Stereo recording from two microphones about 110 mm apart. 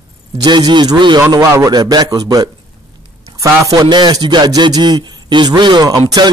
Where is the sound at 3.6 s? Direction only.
35° right (ahead or behind).